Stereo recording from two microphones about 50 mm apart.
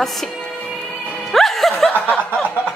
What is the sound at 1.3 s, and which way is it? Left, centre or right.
Music, centre.